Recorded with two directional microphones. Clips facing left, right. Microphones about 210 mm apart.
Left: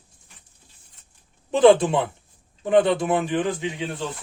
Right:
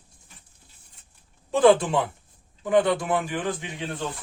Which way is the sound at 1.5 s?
20° left (ahead or behind).